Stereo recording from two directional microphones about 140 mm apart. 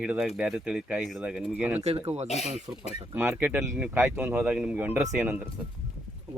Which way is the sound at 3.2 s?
10° right (ahead or behind).